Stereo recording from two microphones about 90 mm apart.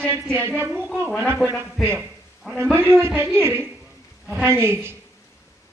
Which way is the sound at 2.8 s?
30° right (ahead or behind).